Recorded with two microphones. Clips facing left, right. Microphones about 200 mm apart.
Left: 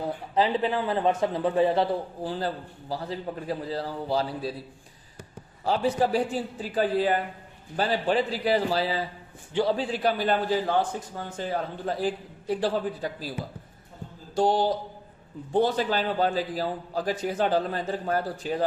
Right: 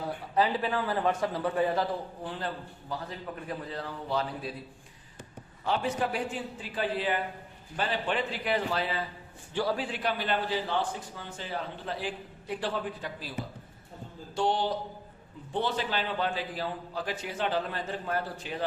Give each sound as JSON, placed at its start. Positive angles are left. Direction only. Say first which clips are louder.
{"t": 0.3, "sound": "a man's voice", "louder": "left 3 dB", "side_deg": 25}
{"t": 5.6, "sound": "a man's voice", "louder": "left 5 dB", "side_deg": 35}
{"t": 9.5, "sound": "a man's voice", "louder": "left 5 dB", "side_deg": 20}
{"t": 14.3, "sound": "a man's voice", "louder": "left 5 dB", "side_deg": 40}